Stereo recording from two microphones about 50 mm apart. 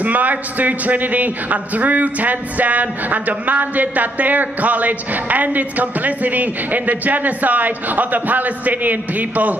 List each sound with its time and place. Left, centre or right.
0.0 s a man's voice: right